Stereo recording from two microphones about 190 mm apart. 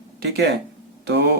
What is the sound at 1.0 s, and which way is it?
Speech, 60° right (ahead or behind).